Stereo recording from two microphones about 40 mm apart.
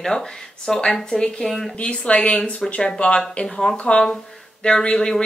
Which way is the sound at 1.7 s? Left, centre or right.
Left.